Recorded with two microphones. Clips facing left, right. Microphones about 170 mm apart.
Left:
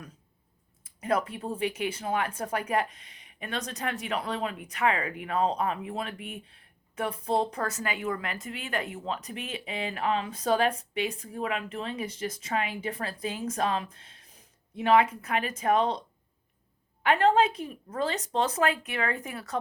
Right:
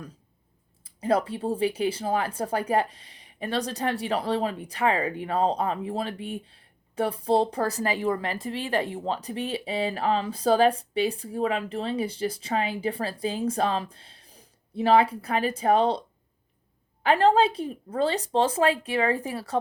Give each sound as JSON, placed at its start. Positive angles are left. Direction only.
{"t": 0.9, "sound": "speech", "side_deg": -30}